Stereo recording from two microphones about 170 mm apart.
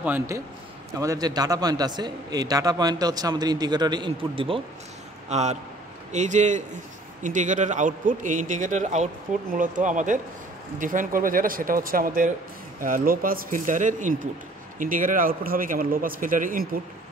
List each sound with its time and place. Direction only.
0.0 s a man's voice: 10° right (ahead or behind); by 16.6 s 55° right (ahead or behind)